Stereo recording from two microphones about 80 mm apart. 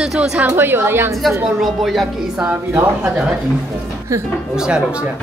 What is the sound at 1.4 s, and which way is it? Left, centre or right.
A woman's voice, centre.